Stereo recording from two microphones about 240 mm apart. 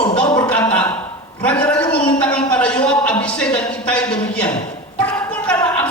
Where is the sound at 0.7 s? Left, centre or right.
Centre.